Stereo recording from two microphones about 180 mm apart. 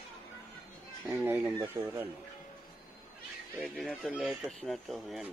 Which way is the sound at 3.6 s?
Centre (ahead or behind).